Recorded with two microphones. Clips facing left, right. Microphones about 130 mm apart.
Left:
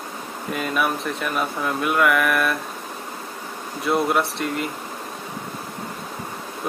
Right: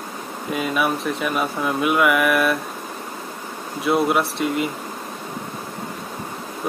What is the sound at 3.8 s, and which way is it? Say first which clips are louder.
Speech: right 2 dB; centre (ahead or behind).